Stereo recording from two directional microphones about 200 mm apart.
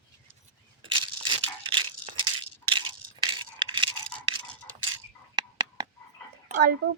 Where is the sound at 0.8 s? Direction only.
25° right (ahead or behind).